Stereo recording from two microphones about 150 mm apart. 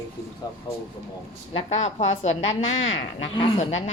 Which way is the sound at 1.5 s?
40° left (ahead or behind).